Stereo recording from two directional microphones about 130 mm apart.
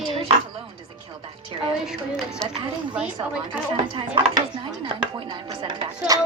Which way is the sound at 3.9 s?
40° right (ahead or behind).